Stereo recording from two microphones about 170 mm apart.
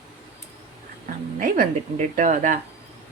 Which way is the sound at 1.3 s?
55° right (ahead or behind).